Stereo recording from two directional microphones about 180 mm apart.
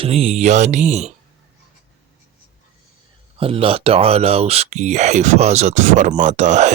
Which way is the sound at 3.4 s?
30° right (ahead or behind).